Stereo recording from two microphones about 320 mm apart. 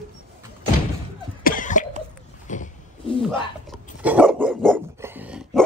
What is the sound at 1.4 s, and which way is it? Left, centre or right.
Cough, left.